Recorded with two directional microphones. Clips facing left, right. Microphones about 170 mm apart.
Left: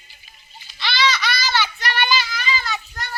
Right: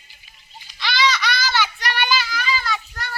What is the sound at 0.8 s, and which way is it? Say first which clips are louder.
Baby laughter: right 1 dB; 10° right (ahead or behind).